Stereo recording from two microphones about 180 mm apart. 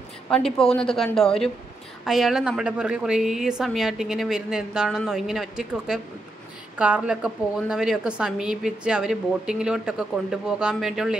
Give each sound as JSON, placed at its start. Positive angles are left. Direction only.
{"t": 0.3, "sound": "a woman's voice", "side_deg": 5}